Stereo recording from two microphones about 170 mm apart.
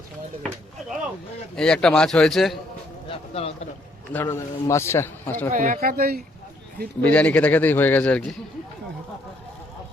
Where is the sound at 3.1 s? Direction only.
35° left (ahead or behind).